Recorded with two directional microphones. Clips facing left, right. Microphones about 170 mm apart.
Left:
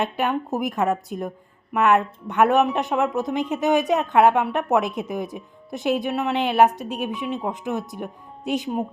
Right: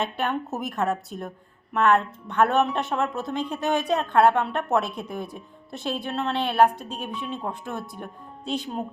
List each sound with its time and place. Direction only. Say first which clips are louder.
0.8 s a woman's voice: even; 15° left (ahead or behind)